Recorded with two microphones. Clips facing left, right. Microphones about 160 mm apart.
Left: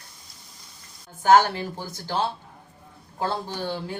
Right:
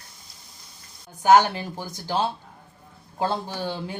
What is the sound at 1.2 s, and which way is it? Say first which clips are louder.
Speech: right 1 dB; 15° right (ahead or behind).